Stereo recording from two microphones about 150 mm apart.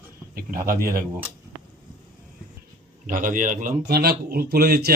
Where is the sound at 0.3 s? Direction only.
75° right (ahead or behind).